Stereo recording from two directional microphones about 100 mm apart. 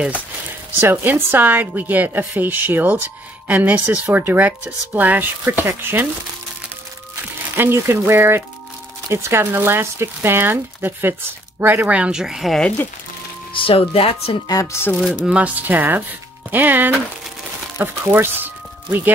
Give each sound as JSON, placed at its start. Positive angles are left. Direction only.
{"t": 0.7, "sound": "speech", "side_deg": -20}
{"t": 7.5, "sound": "speech", "side_deg": -25}
{"t": 13.5, "sound": "speech", "side_deg": 60}
{"t": 14.5, "sound": "speech", "side_deg": 30}
{"t": 15.2, "sound": "speech", "side_deg": -15}